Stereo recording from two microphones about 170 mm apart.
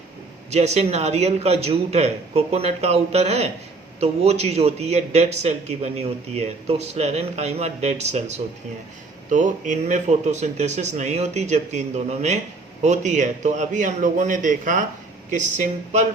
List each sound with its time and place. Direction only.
0.5 s a man's voice: 40° right (ahead or behind)